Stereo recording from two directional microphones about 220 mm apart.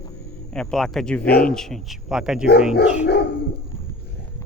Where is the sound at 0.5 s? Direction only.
Centre (ahead or behind).